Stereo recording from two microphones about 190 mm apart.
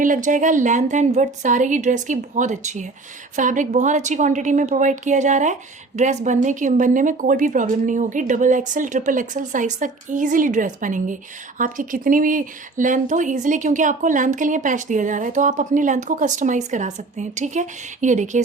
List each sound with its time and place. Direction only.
0.0 s speech: 45° right (ahead or behind)